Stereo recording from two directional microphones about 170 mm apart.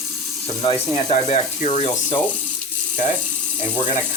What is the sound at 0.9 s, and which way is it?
Speech, 40° left (ahead or behind).